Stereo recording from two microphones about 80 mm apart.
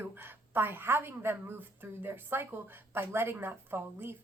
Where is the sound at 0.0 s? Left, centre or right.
Right.